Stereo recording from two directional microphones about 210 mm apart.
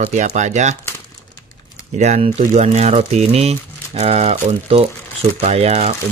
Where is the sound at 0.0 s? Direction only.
35° right (ahead or behind).